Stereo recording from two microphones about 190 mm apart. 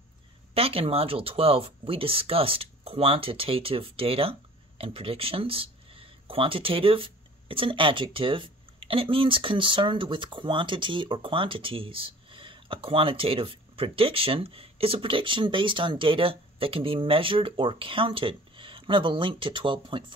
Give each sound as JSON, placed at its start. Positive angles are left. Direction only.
{"t": 0.6, "sound": "speech", "side_deg": -30}